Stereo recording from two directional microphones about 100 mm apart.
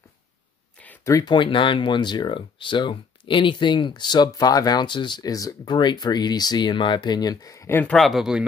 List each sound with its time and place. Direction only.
0.8 s a sound: 10° left (ahead or behind)
1.2 s speech: 55° left (ahead or behind); by 5.8 s 35° left (ahead or behind)
5.8 s speech: 50° left (ahead or behind); by 7.8 s 30° left (ahead or behind)
7.8 s speech: 5° left (ahead or behind)